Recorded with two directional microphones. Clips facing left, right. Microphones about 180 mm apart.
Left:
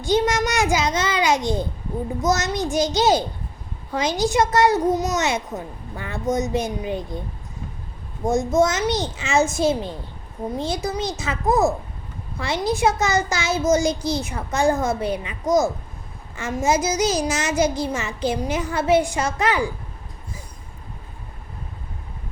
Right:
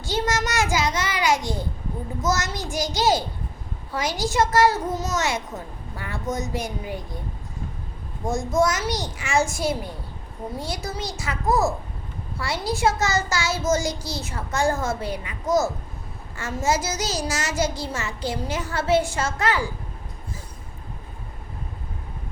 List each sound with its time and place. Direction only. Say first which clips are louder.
0.0 s a child's voice: left 5 dB; 15° left (ahead or behind)
8.2 s a child's voice: left 3 dB; 20° left (ahead or behind)